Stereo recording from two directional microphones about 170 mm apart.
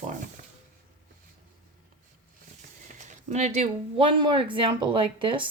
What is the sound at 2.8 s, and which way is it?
Speech, 45° right (ahead or behind).